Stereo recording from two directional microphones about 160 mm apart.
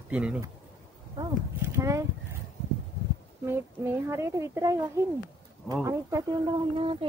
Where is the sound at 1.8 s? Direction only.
20° right (ahead or behind).